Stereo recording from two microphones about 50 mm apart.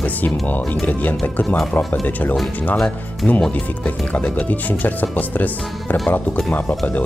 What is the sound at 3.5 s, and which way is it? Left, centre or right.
Speech, left.